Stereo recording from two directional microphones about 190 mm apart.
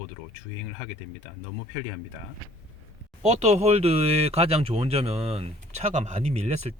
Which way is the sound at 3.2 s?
35° right (ahead or behind).